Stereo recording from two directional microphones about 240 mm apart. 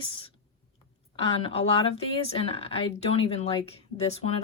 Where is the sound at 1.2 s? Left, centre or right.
Left.